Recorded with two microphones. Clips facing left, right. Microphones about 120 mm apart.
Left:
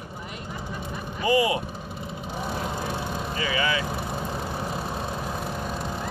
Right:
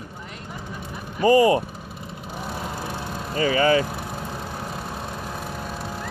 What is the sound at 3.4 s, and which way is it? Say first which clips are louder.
Speech: right 9 dB; 40° right (ahead or behind).